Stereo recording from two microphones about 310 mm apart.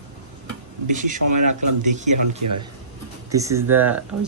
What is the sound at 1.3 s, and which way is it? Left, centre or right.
Speech, right.